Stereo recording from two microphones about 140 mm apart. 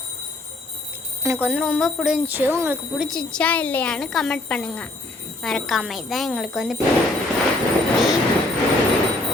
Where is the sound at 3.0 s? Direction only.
5° left (ahead or behind).